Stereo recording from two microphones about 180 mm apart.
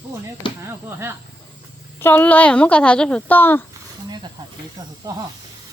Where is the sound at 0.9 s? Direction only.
15° right (ahead or behind).